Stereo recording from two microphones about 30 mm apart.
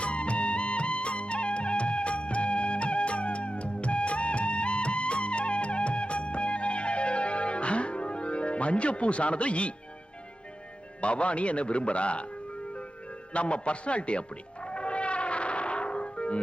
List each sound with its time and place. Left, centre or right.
0.0 s music: left
11.0 s a man's voice: left
13.3 s music: left